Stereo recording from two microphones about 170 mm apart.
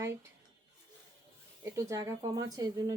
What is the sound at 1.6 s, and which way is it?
Speech, 20° right (ahead or behind).